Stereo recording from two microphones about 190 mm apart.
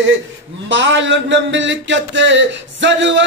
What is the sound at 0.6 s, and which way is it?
Speech, 75° right (ahead or behind).